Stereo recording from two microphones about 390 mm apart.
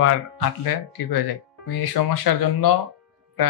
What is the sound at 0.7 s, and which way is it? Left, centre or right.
Speech, left.